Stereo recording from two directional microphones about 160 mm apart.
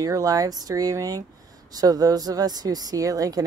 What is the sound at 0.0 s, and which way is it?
Speech, 20° right (ahead or behind).